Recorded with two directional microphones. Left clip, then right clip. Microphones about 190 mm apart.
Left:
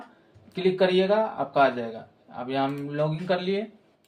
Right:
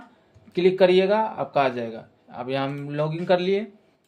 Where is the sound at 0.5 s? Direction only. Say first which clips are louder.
Right 5 dB; 70° right (ahead or behind).